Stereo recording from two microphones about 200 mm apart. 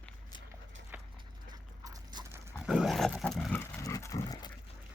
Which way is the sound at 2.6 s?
Centre (ahead or behind).